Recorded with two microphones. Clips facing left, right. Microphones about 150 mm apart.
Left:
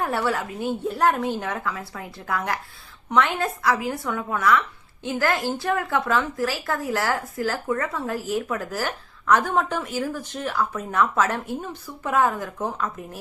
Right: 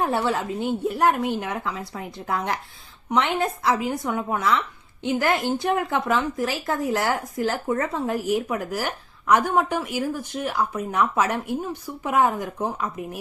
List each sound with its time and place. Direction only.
0.0 s a woman's voice: 20° right (ahead or behind)